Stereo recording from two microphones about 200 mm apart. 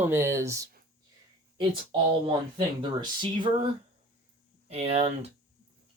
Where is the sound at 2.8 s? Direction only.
25° right (ahead or behind).